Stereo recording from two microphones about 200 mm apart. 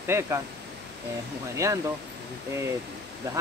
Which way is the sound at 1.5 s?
15° right (ahead or behind).